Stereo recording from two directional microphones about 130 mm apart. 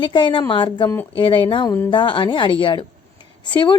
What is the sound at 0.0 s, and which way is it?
Speech, 40° left (ahead or behind).